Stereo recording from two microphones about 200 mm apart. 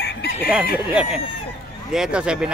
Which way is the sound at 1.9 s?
5° right (ahead or behind).